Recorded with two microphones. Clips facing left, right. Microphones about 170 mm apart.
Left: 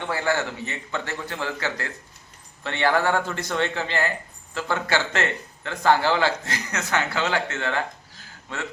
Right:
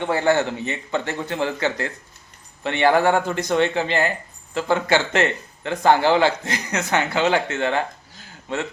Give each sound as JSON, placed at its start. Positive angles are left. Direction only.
{"t": 0.0, "sound": "speech", "side_deg": -20}